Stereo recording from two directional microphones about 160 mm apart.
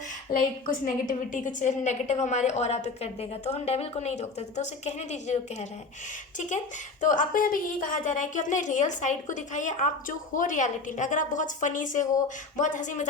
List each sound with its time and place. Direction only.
0.3 s a woman's voice: 60° left (ahead or behind)
7.0 s a woman's voice: 55° left (ahead or behind)